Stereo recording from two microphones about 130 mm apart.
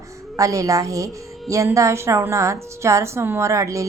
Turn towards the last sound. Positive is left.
turn(degrees=-25)  # may be behind; listen again after turning